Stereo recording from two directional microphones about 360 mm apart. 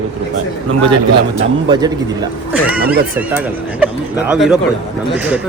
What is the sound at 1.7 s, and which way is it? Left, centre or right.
Speech, centre.